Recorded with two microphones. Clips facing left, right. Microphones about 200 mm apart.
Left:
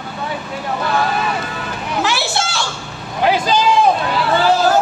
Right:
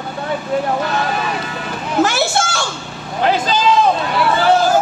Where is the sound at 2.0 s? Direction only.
45° right (ahead or behind).